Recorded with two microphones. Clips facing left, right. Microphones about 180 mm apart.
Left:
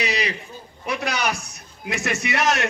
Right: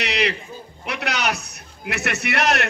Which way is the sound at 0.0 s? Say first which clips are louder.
Right 2 dB; 65° right (ahead or behind).